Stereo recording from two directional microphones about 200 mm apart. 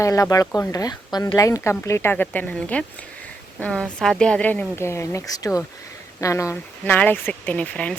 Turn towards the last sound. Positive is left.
turn(degrees=5)  # may be behind; listen again after turning